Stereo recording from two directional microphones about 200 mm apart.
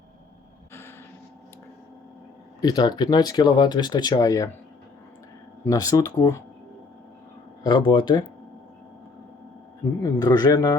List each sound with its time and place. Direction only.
0.7 s a sound: 10° left (ahead or behind)
2.6 s speech: 20° left (ahead or behind)
5.6 s speech: 15° left (ahead or behind)
7.6 s speech: 25° left (ahead or behind)
10.0 s speech: 20° left (ahead or behind)